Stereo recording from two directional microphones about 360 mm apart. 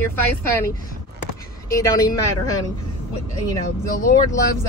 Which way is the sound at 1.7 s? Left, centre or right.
Centre.